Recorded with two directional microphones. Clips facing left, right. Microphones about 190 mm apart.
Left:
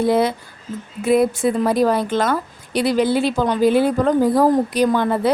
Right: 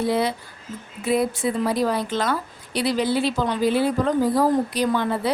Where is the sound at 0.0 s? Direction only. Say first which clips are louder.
Left 5 dB; 50° left (ahead or behind).